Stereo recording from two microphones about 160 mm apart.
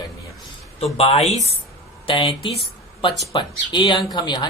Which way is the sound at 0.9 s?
40° left (ahead or behind).